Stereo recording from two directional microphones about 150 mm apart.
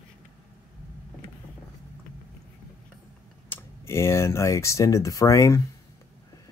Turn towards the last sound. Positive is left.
turn(degrees=20)  # may be behind; listen again after turning